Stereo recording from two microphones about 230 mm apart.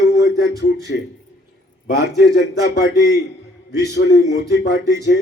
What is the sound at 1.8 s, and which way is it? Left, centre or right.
A man's voice, left.